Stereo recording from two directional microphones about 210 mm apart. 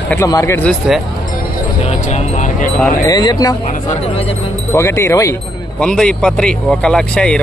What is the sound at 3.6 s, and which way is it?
Speech, 30° left (ahead or behind).